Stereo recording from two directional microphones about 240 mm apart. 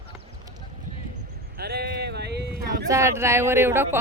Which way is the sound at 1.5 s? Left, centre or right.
Right.